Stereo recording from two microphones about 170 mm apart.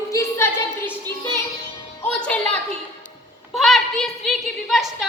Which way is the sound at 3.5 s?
Centre (ahead or behind).